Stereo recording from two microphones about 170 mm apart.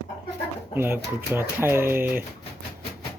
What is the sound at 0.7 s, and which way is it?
Speech, 15° right (ahead or behind).